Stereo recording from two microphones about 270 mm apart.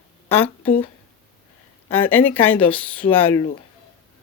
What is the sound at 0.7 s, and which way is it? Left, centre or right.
Speech, left.